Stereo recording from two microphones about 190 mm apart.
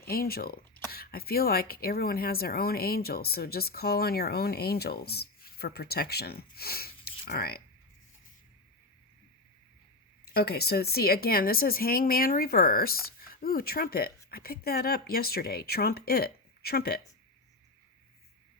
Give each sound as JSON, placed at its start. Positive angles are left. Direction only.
{"t": 0.0, "sound": "speech", "side_deg": 55}
{"t": 10.3, "sound": "speech", "side_deg": 55}